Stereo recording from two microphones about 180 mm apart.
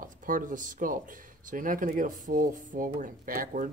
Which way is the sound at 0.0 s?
45° right (ahead or behind).